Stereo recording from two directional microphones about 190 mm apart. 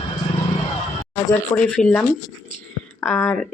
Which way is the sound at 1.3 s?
5° left (ahead or behind).